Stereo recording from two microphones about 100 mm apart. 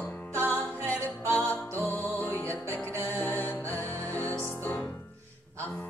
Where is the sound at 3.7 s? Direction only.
20° left (ahead or behind).